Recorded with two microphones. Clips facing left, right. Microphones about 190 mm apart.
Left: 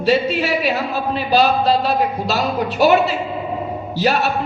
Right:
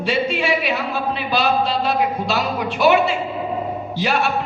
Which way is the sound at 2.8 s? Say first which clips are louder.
Left 1 dB; 40° left (ahead or behind).